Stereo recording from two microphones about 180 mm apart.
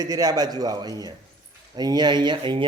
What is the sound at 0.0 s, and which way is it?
Speech, 20° right (ahead or behind).